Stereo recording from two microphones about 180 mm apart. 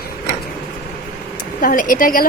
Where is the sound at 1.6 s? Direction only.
50° left (ahead or behind).